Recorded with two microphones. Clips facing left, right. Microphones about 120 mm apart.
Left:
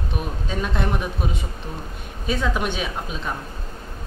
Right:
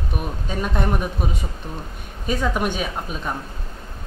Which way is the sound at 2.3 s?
10° right (ahead or behind).